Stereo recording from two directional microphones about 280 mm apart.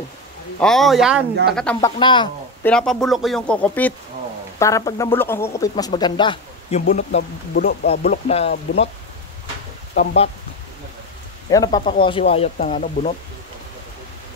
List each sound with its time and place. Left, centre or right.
0.6 s speech: centre
2.0 s speech: centre
2.6 s speech: centre; by 8.8 s left
9.9 s speech: left
11.5 s speech: centre